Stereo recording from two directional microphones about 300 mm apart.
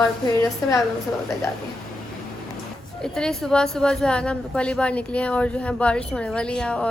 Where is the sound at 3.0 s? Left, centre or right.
Centre.